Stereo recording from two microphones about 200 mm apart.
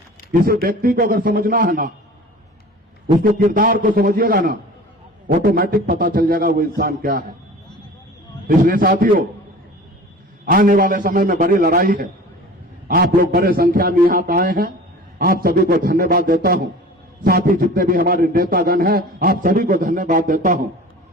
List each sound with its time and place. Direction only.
0.3 s a man's voice: 50° right (ahead or behind)
3.3 s a man's voice: 45° right (ahead or behind)
8.4 s a man's voice: 45° right (ahead or behind)
10.4 s a man's voice: 45° right (ahead or behind)